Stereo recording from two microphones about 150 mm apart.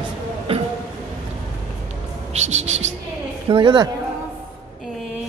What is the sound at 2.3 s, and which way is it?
Bird, 50° right (ahead or behind).